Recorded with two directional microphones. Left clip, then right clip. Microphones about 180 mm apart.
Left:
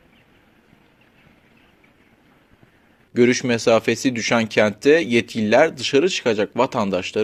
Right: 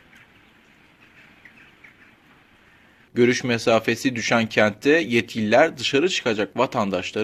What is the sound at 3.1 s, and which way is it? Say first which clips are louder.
Speech: left 2 dB; 25° left (ahead or behind).